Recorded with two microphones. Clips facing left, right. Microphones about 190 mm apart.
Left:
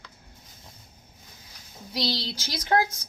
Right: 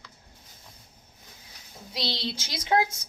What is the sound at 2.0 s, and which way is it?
Speech, 25° right (ahead or behind).